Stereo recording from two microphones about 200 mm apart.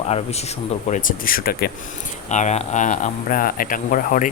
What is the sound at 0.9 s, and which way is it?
Speech, 40° left (ahead or behind).